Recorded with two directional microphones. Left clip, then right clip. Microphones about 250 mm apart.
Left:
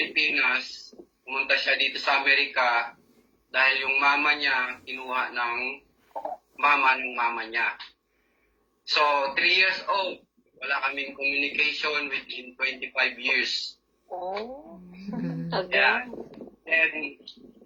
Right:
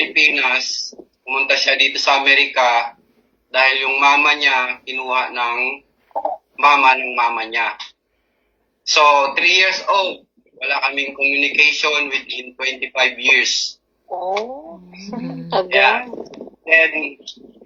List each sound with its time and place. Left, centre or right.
0.0 s a sound: centre
1.2 s a man's voice: centre
8.9 s a man's voice: centre